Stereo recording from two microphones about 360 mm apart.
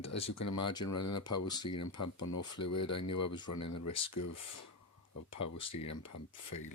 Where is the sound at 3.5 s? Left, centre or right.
Left.